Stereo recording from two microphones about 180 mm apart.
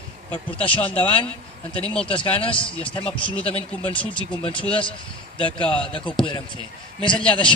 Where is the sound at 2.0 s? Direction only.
30° left (ahead or behind).